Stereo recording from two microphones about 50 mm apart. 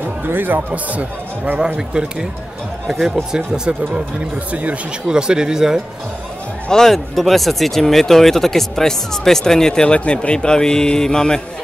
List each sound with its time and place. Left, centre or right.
0.0 s speech: right
0.9 s speech: right
3.3 s speech: centre
5.0 s speech: centre
6.7 s speech: centre